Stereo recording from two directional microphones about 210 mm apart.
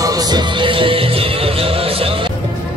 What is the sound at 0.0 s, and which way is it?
Music, 15° right (ahead or behind).